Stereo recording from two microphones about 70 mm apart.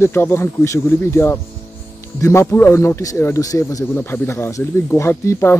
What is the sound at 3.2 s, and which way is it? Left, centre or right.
Speech, left.